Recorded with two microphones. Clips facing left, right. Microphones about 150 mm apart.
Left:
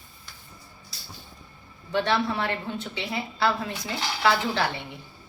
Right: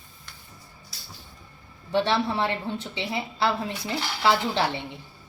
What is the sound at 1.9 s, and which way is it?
A woman's voice, 25° right (ahead or behind).